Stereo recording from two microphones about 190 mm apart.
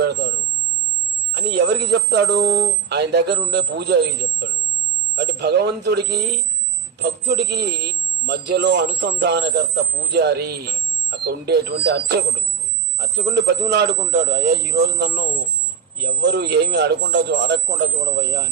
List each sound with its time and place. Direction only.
0.0 s speech: 65° right (ahead or behind)
1.3 s a man's voice: 65° right (ahead or behind)